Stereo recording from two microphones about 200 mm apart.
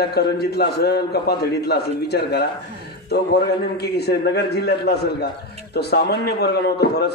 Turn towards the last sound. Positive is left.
turn(degrees=55)  # may be behind; listen again after turning